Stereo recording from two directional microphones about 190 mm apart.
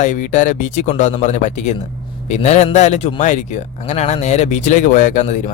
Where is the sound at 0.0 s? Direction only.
40° left (ahead or behind).